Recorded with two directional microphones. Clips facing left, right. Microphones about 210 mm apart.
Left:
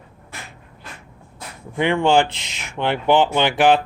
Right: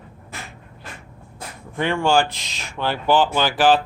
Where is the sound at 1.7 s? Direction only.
15° left (ahead or behind).